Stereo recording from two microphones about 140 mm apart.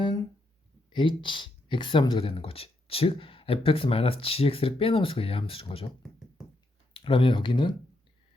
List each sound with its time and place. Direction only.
0.9 s speech: 35° left (ahead or behind)
6.0 s a sound: centre (ahead or behind)
6.9 s speech: 40° left (ahead or behind)